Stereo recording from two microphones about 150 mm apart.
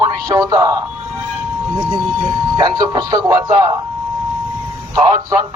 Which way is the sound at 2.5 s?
25° right (ahead or behind).